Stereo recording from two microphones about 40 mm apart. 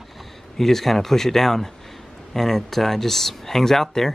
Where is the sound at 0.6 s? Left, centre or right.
Centre.